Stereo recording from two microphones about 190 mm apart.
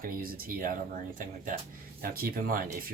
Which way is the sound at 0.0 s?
50° right (ahead or behind).